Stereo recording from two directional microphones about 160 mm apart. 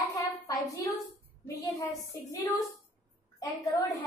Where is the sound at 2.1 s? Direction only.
20° left (ahead or behind).